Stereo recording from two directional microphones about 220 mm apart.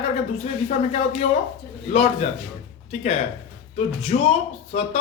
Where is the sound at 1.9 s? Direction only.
25° left (ahead or behind).